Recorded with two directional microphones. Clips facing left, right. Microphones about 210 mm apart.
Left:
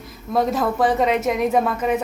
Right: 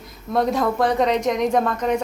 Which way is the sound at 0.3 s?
Centre (ahead or behind).